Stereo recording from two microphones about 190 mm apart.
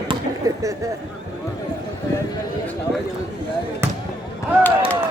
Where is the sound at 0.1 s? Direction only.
20° right (ahead or behind).